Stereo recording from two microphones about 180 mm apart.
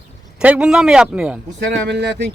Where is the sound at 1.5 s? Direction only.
70° right (ahead or behind).